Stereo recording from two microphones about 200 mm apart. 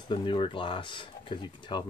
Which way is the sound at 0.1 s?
25° left (ahead or behind).